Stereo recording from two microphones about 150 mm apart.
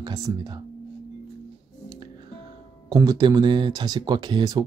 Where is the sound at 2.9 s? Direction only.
25° right (ahead or behind).